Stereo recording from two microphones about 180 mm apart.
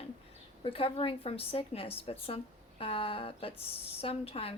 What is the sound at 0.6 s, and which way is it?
Speech, 30° left (ahead or behind).